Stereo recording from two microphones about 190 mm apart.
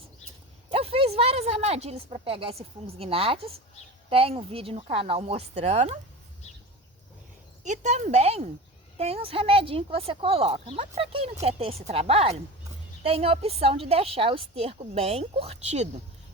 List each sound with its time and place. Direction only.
0.7 s a woman's voice: 30° right (ahead or behind)
7.6 s speech: 40° right (ahead or behind)